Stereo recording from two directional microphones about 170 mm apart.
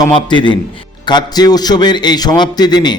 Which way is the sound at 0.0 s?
25° left (ahead or behind).